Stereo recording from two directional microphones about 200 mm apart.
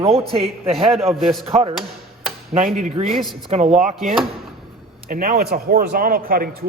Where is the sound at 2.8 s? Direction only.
35° right (ahead or behind).